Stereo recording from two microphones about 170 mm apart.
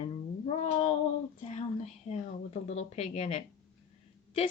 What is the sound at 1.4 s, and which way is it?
Speech, 40° left (ahead or behind).